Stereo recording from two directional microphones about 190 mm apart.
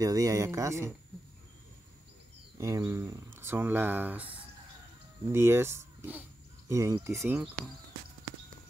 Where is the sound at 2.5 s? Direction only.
15° right (ahead or behind).